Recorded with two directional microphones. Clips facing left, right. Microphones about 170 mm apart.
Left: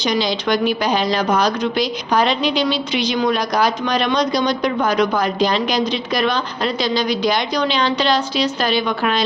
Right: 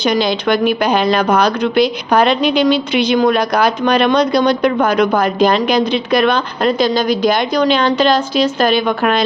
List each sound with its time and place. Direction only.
0.0 s speech: 55° right (ahead or behind)